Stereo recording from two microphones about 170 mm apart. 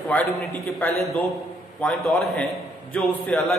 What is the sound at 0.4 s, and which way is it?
Speech, 15° left (ahead or behind).